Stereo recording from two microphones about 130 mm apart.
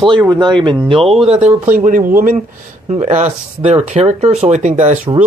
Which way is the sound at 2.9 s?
60° right (ahead or behind).